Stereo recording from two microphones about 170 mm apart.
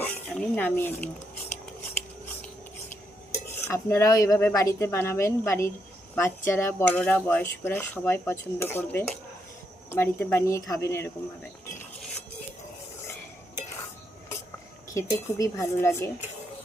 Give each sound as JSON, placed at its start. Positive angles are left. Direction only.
{"t": 0.0, "sound": "speech", "side_deg": 10}
{"t": 3.3, "sound": "speech", "side_deg": 15}
{"t": 14.9, "sound": "speech", "side_deg": 15}